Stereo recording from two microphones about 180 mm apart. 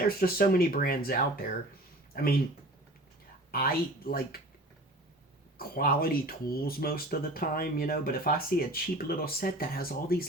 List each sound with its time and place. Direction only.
0.0 s speech: 55° left (ahead or behind)
3.5 s speech: 55° left (ahead or behind)
5.5 s speech: 55° left (ahead or behind)